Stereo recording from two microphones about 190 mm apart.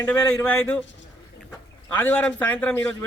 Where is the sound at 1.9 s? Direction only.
10° left (ahead or behind).